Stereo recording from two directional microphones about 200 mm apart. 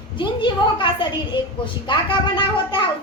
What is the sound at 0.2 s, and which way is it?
A woman's voice, 25° left (ahead or behind).